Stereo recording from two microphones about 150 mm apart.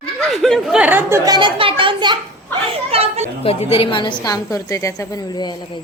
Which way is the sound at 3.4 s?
40° left (ahead or behind).